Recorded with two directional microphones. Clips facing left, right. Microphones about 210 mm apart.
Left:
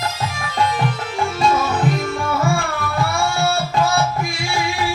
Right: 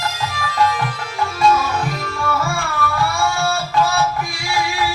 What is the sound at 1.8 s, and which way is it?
Tabla, 20° left (ahead or behind).